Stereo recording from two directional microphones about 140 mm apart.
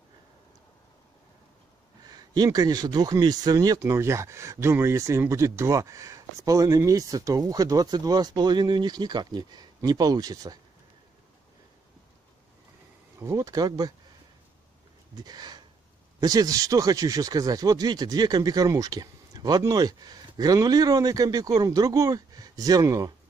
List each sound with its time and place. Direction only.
2.0 s speech: 30° right (ahead or behind)
13.2 s speech: 25° right (ahead or behind)
15.1 s speech: 30° right (ahead or behind)